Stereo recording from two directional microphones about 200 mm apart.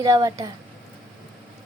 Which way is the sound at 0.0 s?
20° right (ahead or behind).